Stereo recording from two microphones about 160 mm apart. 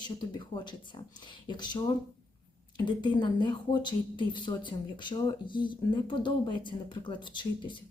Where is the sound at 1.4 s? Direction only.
30° left (ahead or behind).